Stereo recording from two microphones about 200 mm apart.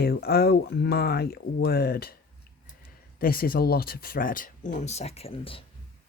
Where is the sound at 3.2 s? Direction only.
45° left (ahead or behind).